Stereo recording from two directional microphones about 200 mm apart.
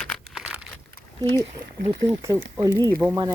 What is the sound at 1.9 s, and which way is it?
Speech, 15° right (ahead or behind).